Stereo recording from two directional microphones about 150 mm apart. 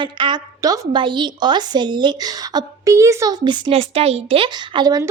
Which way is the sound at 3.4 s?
35° right (ahead or behind).